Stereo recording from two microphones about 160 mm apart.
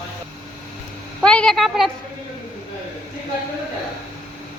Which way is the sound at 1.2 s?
5° left (ahead or behind).